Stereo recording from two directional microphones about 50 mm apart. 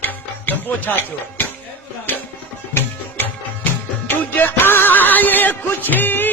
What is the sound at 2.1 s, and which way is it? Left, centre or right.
Music, left.